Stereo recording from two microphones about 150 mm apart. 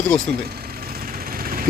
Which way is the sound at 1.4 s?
75° right (ahead or behind).